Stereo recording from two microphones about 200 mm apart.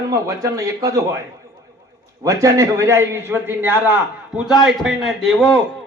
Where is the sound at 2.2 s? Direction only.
15° right (ahead or behind).